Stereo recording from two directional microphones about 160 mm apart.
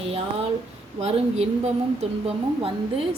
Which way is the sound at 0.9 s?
40° right (ahead or behind).